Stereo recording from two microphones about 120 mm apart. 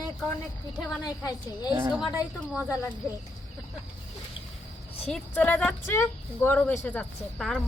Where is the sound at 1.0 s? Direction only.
35° left (ahead or behind).